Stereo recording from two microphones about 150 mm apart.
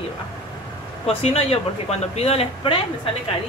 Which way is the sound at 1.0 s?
40° left (ahead or behind).